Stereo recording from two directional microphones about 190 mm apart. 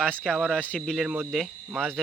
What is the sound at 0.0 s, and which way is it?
Speech, 5° left (ahead or behind).